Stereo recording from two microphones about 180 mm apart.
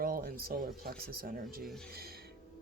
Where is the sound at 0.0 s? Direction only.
55° right (ahead or behind).